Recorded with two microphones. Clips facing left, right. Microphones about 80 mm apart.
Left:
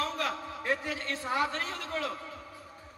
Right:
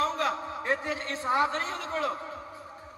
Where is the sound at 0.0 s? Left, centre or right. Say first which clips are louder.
Right 5 dB; right.